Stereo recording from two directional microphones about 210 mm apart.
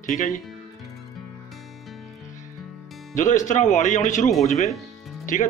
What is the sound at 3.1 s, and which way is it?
Speech, 35° left (ahead or behind).